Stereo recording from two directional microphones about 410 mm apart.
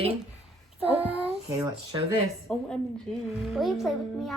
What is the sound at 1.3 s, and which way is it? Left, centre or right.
Child singing, centre.